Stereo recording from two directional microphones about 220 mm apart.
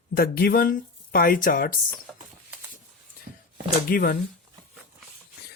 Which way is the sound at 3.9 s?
40° left (ahead or behind).